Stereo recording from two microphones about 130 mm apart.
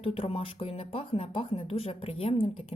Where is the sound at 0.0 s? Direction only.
50° left (ahead or behind).